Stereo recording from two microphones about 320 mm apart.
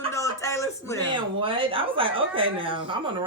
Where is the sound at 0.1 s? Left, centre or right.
Centre.